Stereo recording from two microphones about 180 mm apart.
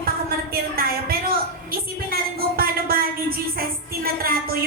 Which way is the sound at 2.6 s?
55° right (ahead or behind).